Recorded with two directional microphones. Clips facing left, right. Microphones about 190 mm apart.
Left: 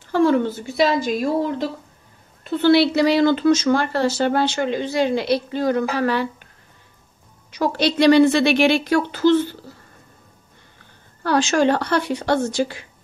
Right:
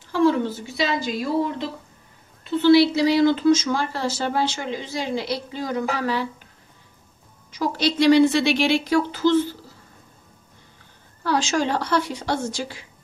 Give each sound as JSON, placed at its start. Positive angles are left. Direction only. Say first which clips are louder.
{"t": 0.1, "sound": "speech", "louder": "left 2 dB", "side_deg": 55}
{"t": 7.5, "sound": "speech", "louder": "left 3 dB", "side_deg": 60}
{"t": 11.2, "sound": "speech", "louder": "left 5 dB", "side_deg": 60}